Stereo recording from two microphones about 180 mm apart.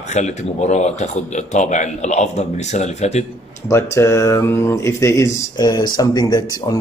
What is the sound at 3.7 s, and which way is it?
Speech, 15° left (ahead or behind).